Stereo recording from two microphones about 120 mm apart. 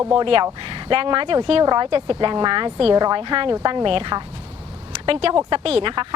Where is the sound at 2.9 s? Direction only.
35° right (ahead or behind).